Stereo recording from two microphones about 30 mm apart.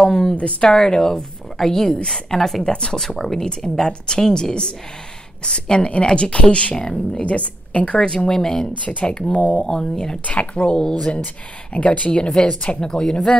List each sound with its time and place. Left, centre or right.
0.6 s a woman's voice: left
2.6 s a woman's voice: left
6.7 s a woman's voice: left
7.2 s a woman's voice: left
8.0 s a woman's voice: left
9.3 s speech: left
9.7 s a woman's voice: left
10.2 s a woman's voice: left
10.6 s a woman's voice: left
11.7 s a woman's voice: left
12.1 s a woman's voice: left